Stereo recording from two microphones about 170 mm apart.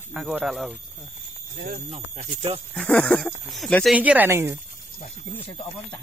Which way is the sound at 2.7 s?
10° left (ahead or behind).